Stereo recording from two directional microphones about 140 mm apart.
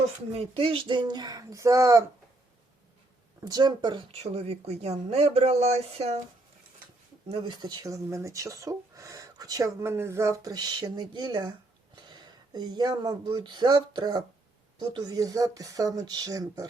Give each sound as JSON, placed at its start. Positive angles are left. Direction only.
{"t": 0.3, "sound": "speech", "side_deg": -40}
{"t": 3.4, "sound": "a woman's voice", "side_deg": -30}
{"t": 7.3, "sound": "speech", "side_deg": -40}